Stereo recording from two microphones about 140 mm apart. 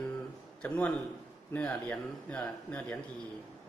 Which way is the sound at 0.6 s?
10° left (ahead or behind).